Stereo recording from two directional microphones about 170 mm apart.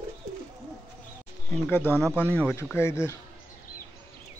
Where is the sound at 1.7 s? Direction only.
10° left (ahead or behind).